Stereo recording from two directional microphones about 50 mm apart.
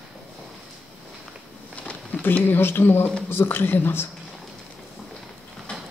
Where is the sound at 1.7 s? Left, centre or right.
Left.